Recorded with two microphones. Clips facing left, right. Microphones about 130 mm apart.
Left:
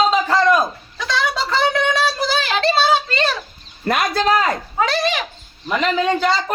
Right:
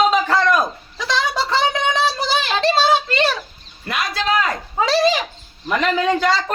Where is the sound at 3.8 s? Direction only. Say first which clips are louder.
Left 5 dB; 45° left (ahead or behind).